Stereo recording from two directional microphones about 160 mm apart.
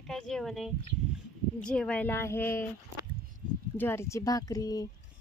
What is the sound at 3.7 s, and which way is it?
Speech, 15° left (ahead or behind).